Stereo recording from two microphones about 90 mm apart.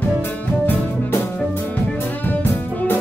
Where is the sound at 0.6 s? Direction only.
20° left (ahead or behind).